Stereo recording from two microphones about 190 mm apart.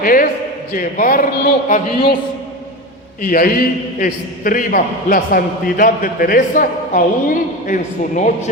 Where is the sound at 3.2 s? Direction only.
50° left (ahead or behind).